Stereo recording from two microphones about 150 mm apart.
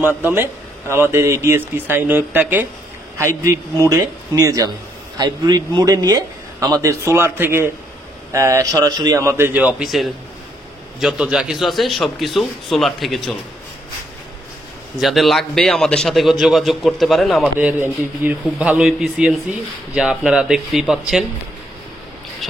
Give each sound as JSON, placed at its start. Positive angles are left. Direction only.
{"t": 0.0, "sound": "a man's voice", "side_deg": -15}
{"t": 15.0, "sound": "a man's voice", "side_deg": 0}
{"t": 17.6, "sound": "a man's voice", "side_deg": -10}